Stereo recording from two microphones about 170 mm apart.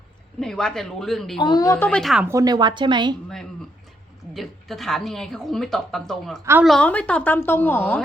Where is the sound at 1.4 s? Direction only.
25° left (ahead or behind).